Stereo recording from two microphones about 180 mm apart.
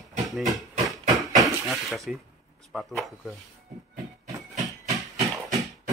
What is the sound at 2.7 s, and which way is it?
Speech, centre (ahead or behind).